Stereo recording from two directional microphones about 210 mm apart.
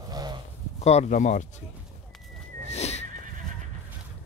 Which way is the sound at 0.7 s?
30° left (ahead or behind).